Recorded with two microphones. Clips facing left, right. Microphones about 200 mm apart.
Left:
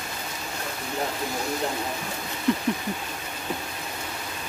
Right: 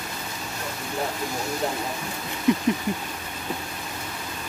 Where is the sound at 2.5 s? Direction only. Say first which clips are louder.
Right 3 dB; 15° right (ahead or behind).